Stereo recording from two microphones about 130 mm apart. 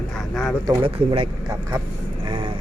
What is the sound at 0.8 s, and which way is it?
Speech, 40° right (ahead or behind).